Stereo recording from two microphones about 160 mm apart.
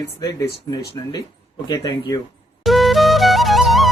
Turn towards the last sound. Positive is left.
turn(degrees=0)  # may be behind; listen again after turning